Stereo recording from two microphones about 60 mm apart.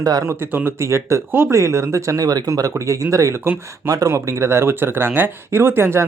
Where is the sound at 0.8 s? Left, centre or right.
Right.